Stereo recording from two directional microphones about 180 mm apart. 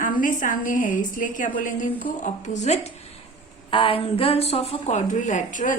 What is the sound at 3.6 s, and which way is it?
A woman's voice, 30° left (ahead or behind).